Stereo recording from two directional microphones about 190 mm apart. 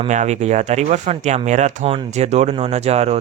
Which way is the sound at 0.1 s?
35° right (ahead or behind).